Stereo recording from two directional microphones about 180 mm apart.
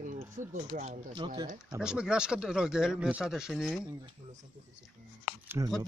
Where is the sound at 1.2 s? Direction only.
25° right (ahead or behind).